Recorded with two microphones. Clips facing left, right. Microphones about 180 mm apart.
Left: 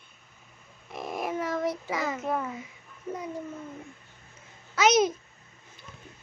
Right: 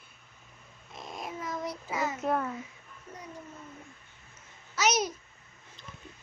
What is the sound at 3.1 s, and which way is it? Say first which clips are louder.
Speech: left 12 dB; 90° left.